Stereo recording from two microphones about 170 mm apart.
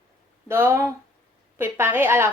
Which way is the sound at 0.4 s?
15° right (ahead or behind).